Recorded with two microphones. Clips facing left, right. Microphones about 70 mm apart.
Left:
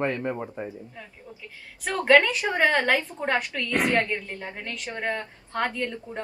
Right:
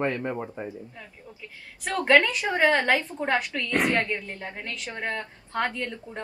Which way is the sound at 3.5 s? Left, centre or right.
Centre.